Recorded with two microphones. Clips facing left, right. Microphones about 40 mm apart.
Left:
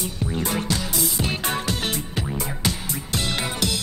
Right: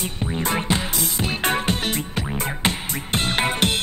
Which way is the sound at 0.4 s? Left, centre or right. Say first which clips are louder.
Right 3 dB; right.